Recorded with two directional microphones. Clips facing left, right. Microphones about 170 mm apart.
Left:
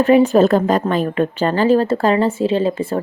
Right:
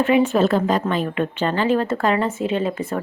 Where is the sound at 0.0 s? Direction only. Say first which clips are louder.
Left 5 dB; 40° left (ahead or behind).